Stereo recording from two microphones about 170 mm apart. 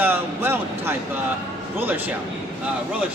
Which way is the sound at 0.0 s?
10° right (ahead or behind).